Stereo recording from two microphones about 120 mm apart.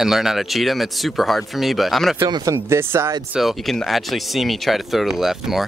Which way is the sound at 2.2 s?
35° right (ahead or behind).